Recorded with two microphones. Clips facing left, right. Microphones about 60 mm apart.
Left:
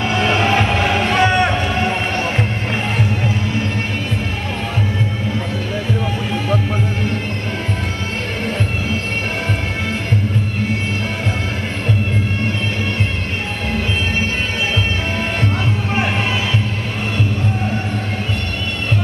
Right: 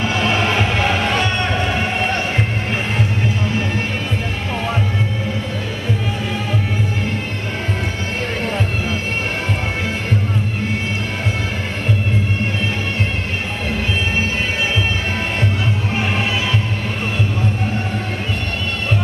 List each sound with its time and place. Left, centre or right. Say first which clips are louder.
1.1 s music: left 5 dB; centre